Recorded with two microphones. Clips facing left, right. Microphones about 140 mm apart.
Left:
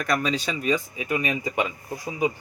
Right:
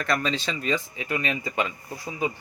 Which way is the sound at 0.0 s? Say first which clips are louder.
Left 1 dB; 10° left (ahead or behind).